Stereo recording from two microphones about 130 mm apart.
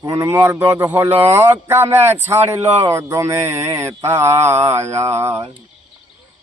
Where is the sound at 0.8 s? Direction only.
15° right (ahead or behind).